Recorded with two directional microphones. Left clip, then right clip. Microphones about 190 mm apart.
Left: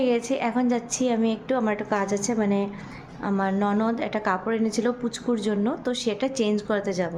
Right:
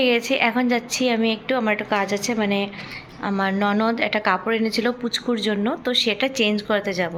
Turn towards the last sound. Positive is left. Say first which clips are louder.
# right 4 dB
turn(degrees=15)  # may be behind; listen again after turning